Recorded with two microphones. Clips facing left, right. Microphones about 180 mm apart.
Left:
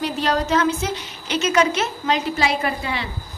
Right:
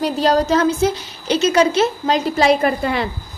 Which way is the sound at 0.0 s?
35° right (ahead or behind).